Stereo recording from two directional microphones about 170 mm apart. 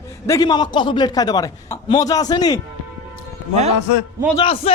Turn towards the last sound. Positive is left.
turn(degrees=35)  # may be behind; listen again after turning